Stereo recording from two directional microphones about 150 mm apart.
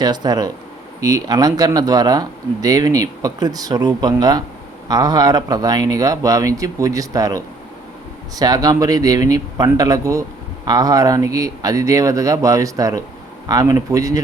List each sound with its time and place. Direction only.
0.0 s speech: 25° right (ahead or behind)